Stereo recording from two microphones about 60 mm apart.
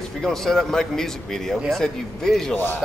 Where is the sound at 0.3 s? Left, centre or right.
Centre.